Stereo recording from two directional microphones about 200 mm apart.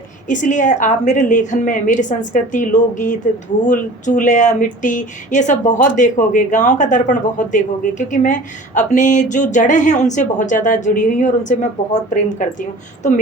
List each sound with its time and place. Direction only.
0.3 s speech: 40° left (ahead or behind)